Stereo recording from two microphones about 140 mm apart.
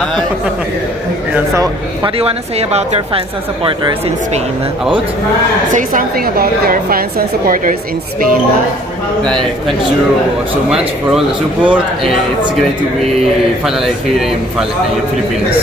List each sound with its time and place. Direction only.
2.1 s speech: 45° right (ahead or behind)
5.8 s a woman's voice: 80° right
9.2 s speech: 5° left (ahead or behind)